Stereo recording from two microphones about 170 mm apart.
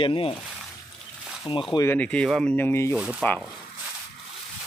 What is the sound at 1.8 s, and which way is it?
Speech, 10° left (ahead or behind).